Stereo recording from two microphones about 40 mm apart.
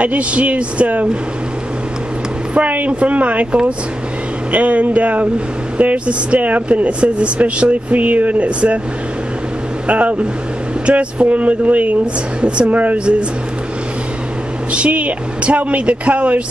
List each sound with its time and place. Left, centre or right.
0.0 s speech: right
2.5 s speech: right
9.8 s speech: right
14.7 s speech: right